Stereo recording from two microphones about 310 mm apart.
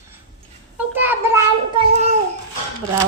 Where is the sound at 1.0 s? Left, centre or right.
Centre.